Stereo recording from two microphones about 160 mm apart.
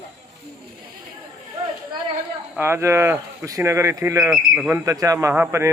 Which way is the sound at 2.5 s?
15° right (ahead or behind).